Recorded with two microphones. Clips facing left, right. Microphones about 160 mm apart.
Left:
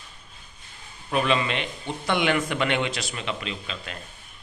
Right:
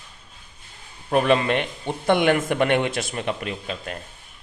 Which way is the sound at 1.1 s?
50° right (ahead or behind).